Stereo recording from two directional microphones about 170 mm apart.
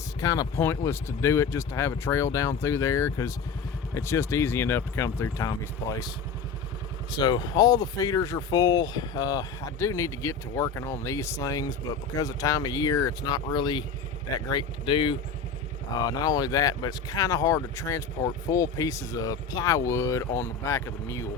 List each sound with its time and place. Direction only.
0.2 s speech: 20° left (ahead or behind)
7.1 s speech: 25° left (ahead or behind)